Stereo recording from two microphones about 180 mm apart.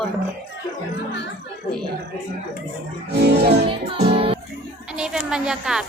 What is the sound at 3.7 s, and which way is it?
Speech, 30° right (ahead or behind).